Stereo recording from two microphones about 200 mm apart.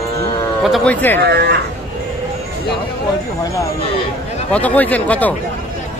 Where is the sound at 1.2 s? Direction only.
50° right (ahead or behind).